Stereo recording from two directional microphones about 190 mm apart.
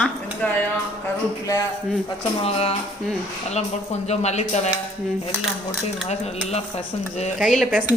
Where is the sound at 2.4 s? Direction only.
30° left (ahead or behind).